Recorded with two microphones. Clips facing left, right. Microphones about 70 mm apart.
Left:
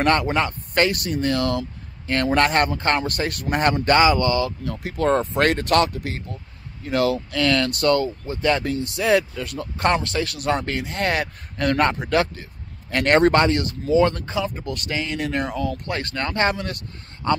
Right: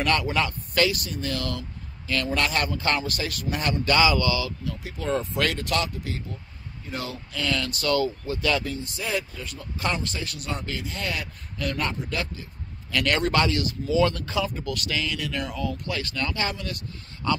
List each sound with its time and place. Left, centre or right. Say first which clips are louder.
0.0 s speech: left 5 dB; left
0.9 s a man's voice: left 8 dB; left
6.8 s speech: left 13 dB; left
8.3 s speech: left 4 dB; left
8.6 s speech: left 10 dB; left
12.9 s speech: left 7 dB; left
17.2 s speech: left 4 dB; left